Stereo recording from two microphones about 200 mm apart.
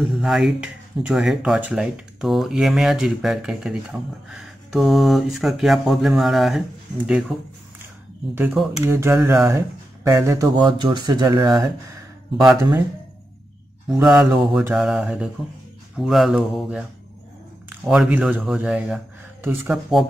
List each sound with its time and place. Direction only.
0.1 s speech: centre (ahead or behind)
8.4 s speech: 10° right (ahead or behind)
13.9 s speech: 5° right (ahead or behind)